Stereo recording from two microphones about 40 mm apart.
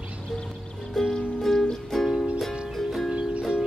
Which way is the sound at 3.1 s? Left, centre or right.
Right.